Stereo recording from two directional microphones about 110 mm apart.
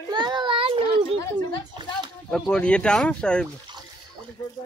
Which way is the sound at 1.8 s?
45° right (ahead or behind).